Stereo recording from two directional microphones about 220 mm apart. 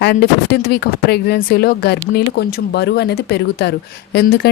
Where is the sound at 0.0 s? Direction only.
45° left (ahead or behind).